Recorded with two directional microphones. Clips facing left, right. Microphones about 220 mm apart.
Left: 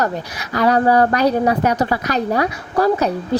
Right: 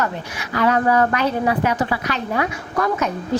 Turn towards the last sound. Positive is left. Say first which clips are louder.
# left 5 dB
turn(degrees=35)  # may be behind; listen again after turning